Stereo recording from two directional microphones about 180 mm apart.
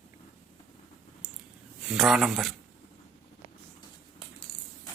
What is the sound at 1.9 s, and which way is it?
Speech, centre (ahead or behind).